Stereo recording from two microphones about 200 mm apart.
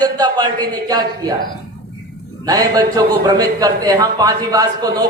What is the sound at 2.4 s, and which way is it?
A man's voice, 20° right (ahead or behind).